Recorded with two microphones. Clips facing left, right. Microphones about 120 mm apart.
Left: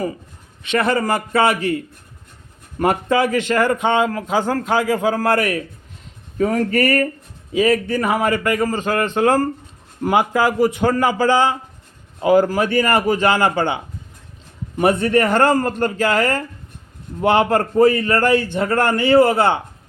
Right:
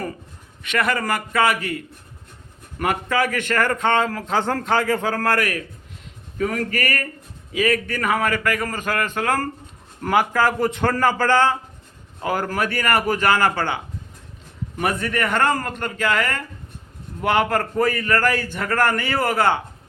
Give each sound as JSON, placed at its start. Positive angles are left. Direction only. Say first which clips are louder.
{"t": 0.6, "sound": "a man's voice", "louder": "left 4 dB", "side_deg": 25}